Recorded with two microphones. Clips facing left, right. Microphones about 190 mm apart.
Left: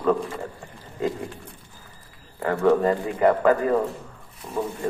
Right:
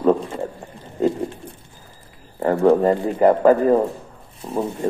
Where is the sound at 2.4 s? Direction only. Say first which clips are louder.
Right 4 dB; 30° right (ahead or behind).